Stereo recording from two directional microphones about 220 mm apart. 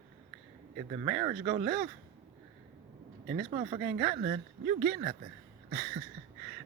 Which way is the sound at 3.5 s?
30° right (ahead or behind).